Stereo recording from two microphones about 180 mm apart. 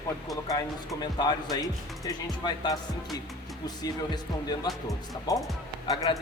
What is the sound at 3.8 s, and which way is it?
Speech, 20° left (ahead or behind).